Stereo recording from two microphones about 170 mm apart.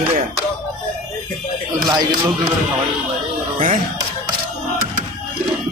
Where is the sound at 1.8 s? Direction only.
25° right (ahead or behind).